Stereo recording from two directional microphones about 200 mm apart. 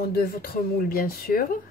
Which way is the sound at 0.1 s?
50° left (ahead or behind).